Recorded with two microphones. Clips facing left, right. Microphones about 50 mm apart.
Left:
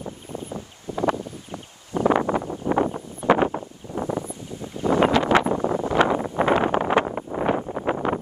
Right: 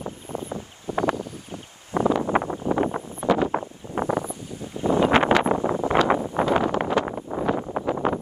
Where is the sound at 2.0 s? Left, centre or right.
Left.